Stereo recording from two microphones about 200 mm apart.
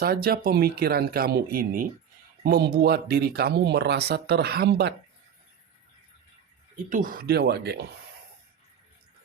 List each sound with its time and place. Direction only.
0.0 s speech: 50° right (ahead or behind)
6.9 s speech: 45° right (ahead or behind)